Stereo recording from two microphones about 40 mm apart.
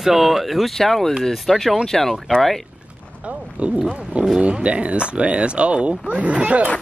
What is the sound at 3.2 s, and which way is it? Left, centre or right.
Speech, right.